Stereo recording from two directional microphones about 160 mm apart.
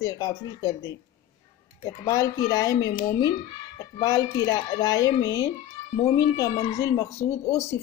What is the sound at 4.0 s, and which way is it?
A woman's voice, 20° left (ahead or behind).